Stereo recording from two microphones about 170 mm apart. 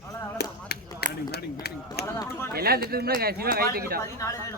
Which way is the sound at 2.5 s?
65° right (ahead or behind).